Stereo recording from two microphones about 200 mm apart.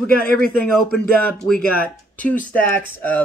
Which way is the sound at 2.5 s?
10° left (ahead or behind).